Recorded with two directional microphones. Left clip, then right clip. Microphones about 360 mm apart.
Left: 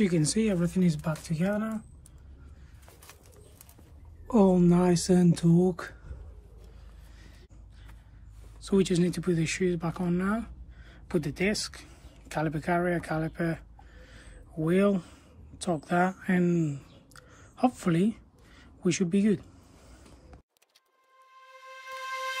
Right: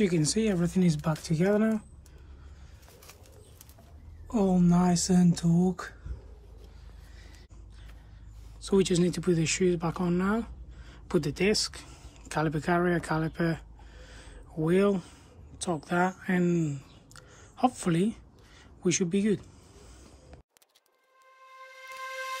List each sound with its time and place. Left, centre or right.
0.0 s speech: centre
4.3 s speech: centre
8.5 s speech: centre